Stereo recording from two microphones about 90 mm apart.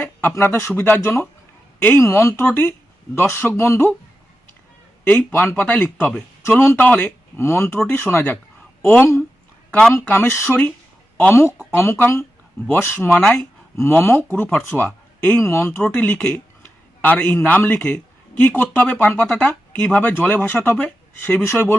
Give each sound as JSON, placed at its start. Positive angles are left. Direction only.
{"t": 0.0, "sound": "speech", "side_deg": 20}
{"t": 1.0, "sound": "speech", "side_deg": 30}
{"t": 5.0, "sound": "speech", "side_deg": 25}
{"t": 6.7, "sound": "speech", "side_deg": 20}
{"t": 10.1, "sound": "a man's voice", "side_deg": 25}